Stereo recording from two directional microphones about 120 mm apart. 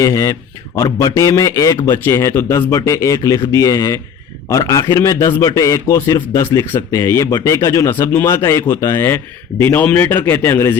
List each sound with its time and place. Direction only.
0.0 s a man's voice: 30° left (ahead or behind)